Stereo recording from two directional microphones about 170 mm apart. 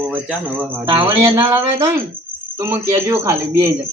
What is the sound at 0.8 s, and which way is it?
Speech, 25° right (ahead or behind).